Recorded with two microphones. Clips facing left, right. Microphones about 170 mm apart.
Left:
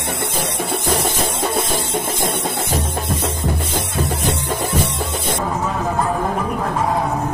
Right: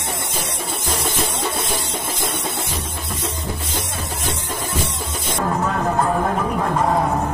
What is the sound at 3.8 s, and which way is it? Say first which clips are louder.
Music: left 6 dB; 65° left (ahead or behind).